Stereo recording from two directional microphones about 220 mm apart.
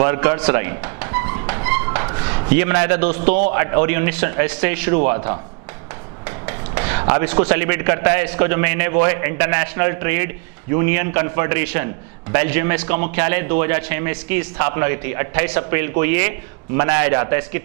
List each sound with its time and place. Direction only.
0.0 s music: 15° right (ahead or behind)
3.5 s a man's voice: 15° right (ahead or behind)
6.2 s a sound: 15° right (ahead or behind)
7.0 s a man's voice: 15° right (ahead or behind)